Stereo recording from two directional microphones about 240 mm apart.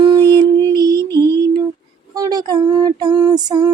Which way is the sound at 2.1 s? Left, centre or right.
Centre.